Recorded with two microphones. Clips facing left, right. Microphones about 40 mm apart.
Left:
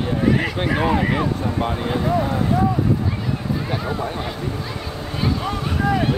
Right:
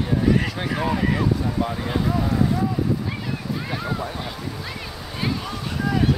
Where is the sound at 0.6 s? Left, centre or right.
Left.